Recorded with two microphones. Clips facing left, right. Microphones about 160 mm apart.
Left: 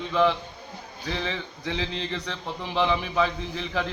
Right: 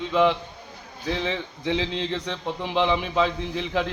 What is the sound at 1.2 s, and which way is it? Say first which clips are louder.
Speech: right 3 dB; 20° right (ahead or behind).